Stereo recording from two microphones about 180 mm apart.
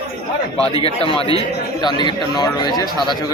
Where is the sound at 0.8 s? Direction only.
30° left (ahead or behind).